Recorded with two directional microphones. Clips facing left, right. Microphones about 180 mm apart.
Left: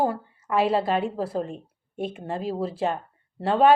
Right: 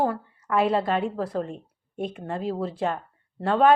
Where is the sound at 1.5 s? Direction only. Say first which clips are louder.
Even; 5° left (ahead or behind).